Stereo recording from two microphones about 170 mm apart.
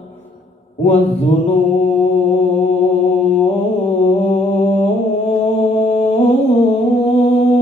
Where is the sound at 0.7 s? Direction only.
35° left (ahead or behind).